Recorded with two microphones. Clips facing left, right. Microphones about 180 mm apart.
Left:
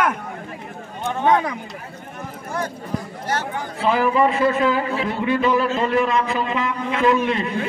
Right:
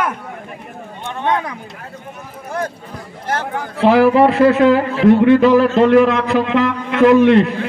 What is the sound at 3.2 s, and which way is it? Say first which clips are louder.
A man's voice: right 7 dB; 55° right (ahead or behind).